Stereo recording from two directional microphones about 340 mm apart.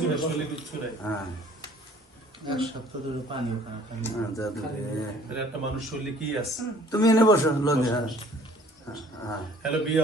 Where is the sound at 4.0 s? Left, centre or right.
Centre.